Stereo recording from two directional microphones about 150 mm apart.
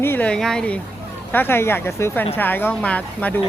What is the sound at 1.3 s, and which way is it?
Speech, 15° left (ahead or behind).